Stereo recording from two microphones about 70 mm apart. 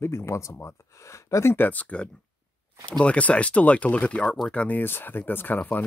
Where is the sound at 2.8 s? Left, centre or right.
Centre.